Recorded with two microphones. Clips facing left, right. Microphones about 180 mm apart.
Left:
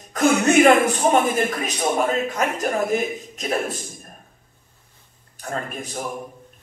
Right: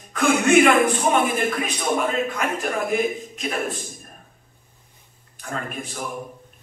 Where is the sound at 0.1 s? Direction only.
40° left (ahead or behind).